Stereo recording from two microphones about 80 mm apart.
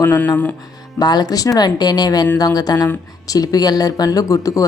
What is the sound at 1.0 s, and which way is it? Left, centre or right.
Speech, left.